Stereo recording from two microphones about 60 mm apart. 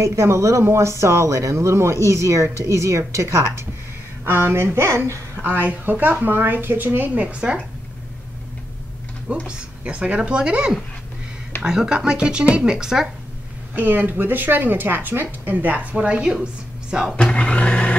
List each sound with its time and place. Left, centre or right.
0.0 s speech: right
4.2 s a woman's voice: right
4.8 s speech: right
5.5 s a woman's voice: right
9.5 s speech: centre
13.7 s a woman's voice: right
17.2 s speech: centre